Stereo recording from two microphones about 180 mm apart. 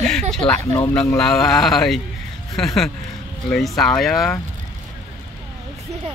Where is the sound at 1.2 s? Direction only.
Centre (ahead or behind).